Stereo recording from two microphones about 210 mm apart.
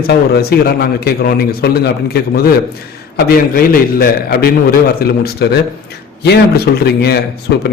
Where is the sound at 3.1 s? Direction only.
45° left (ahead or behind).